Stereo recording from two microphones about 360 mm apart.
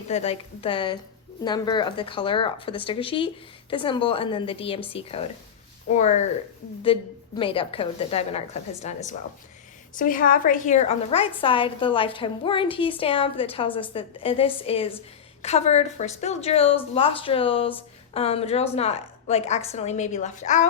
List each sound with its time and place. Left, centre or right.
0.1 s a woman's voice: centre